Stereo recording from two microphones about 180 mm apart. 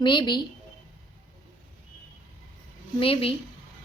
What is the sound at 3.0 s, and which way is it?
Speech, 30° left (ahead or behind).